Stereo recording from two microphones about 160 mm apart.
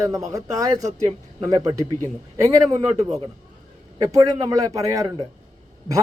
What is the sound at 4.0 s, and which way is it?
A man's voice, 25° right (ahead or behind).